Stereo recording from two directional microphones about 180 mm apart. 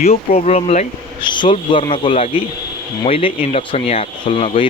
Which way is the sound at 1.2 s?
25° left (ahead or behind).